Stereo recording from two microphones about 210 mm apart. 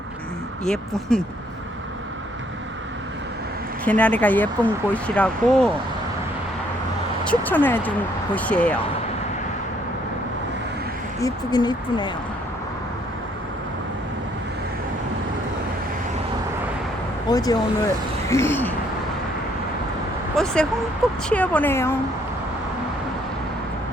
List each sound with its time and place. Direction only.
0.6 s speech: 5° left (ahead or behind)
3.8 s speech: 5° left (ahead or behind)
7.3 s speech: 10° left (ahead or behind)
11.2 s speech: 20° left (ahead or behind)
17.2 s speech: 15° left (ahead or behind)
20.3 s speech: 5° left (ahead or behind)